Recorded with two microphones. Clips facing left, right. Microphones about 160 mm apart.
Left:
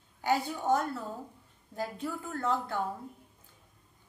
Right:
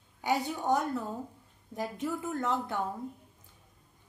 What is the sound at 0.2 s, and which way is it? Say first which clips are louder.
A woman's voice: left 1 dB; 15° right (ahead or behind).